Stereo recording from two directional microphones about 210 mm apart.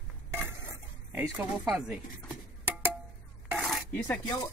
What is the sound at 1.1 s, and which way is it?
Speech, 10° right (ahead or behind).